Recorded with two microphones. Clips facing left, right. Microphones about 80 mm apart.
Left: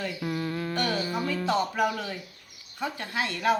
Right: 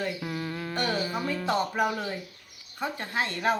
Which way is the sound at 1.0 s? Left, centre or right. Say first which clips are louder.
Left 1 dB; centre.